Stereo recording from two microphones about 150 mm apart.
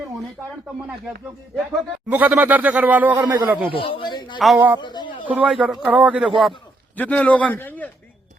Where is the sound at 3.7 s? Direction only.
35° left (ahead or behind).